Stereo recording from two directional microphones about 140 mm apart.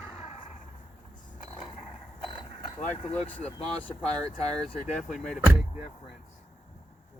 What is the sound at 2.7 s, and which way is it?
Vehicle, 55° left (ahead or behind).